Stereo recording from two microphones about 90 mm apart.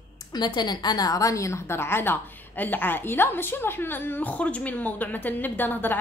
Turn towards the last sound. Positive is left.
turn(degrees=20)  # may be behind; listen again after turning